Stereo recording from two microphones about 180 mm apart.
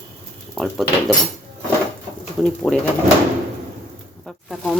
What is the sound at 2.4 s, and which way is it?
Speech, 5° left (ahead or behind).